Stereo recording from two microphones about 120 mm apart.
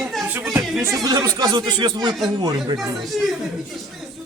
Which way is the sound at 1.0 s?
30° right (ahead or behind).